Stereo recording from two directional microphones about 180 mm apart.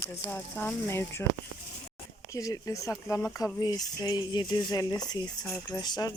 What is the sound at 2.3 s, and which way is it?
Speech, 20° left (ahead or behind).